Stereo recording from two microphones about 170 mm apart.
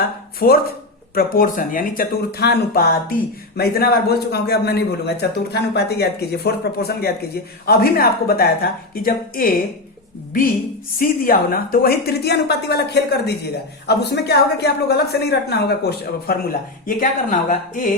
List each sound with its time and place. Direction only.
0.3 s a woman's voice: 60° left (ahead or behind)
11.0 s a woman's voice: 60° left (ahead or behind)